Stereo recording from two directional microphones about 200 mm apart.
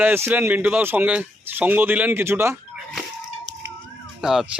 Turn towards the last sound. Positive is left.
turn(degrees=0)  # may be behind; listen again after turning